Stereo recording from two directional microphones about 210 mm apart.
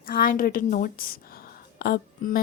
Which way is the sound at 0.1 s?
40° left (ahead or behind).